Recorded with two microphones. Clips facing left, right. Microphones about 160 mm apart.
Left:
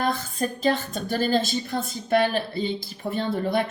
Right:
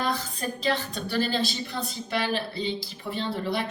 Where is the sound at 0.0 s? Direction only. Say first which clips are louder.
Left 3 dB; 50° left (ahead or behind).